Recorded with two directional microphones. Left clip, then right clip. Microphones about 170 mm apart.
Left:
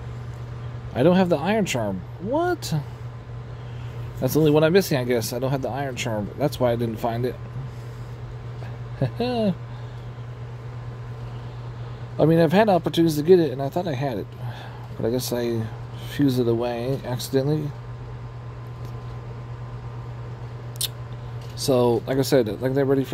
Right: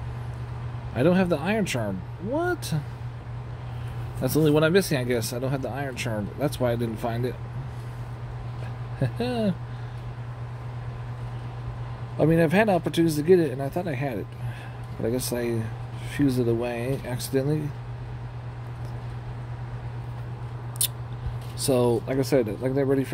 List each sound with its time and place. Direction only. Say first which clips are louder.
0.9 s speech: left 4 dB; 20° left (ahead or behind)
4.2 s speech: left 3 dB; 15° left (ahead or behind)
9.0 s speech: left 3 dB; 15° left (ahead or behind)
12.2 s speech: left 3 dB; 15° left (ahead or behind)
21.5 s speech: left 3 dB; 15° left (ahead or behind)